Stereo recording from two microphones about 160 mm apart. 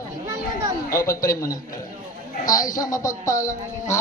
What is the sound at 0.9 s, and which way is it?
Speech, 20° left (ahead or behind).